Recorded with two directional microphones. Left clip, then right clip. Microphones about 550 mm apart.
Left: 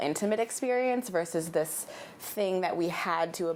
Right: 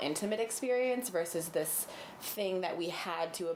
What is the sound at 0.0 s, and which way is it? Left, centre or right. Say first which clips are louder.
A woman's voice: left 5 dB; left.